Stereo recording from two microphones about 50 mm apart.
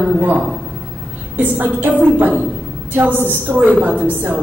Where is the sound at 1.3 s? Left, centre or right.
Right.